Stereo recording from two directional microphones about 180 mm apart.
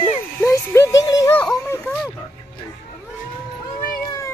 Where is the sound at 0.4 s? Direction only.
15° left (ahead or behind).